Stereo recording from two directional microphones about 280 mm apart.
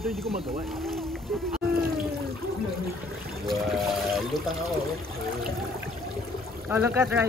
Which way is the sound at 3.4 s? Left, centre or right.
Centre.